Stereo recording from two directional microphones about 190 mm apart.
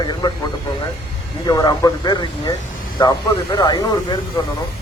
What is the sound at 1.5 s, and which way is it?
Speech, 20° left (ahead or behind).